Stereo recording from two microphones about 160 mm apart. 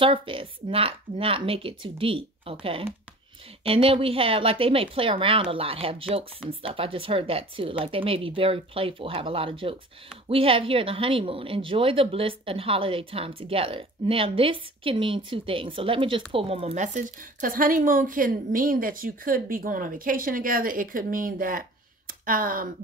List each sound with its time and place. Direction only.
0.0 s speech: 30° right (ahead or behind); by 22.7 s 60° right (ahead or behind)